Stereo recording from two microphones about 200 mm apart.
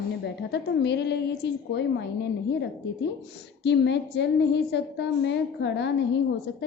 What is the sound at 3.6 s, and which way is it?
Speech, 60° left (ahead or behind).